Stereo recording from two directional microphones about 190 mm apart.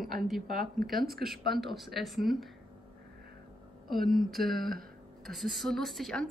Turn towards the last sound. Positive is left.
turn(degrees=0)  # may be behind; listen again after turning